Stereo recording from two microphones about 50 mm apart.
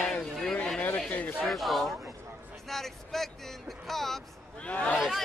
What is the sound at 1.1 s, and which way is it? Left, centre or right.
Speech, left.